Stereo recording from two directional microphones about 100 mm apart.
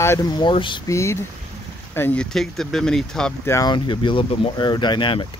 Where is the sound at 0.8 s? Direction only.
30° left (ahead or behind).